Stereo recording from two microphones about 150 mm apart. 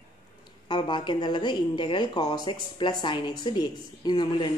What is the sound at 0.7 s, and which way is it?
A woman's voice, 30° left (ahead or behind).